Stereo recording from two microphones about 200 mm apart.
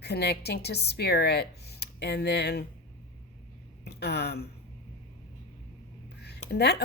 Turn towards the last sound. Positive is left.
turn(degrees=55)  # may be behind; listen again after turning